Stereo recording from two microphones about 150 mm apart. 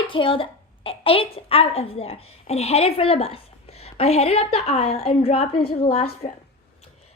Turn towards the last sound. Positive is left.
turn(degrees=45)  # may be behind; listen again after turning